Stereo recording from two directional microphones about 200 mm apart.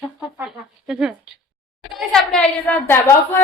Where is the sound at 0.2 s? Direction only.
5° right (ahead or behind); by 3.2 s 10° left (ahead or behind).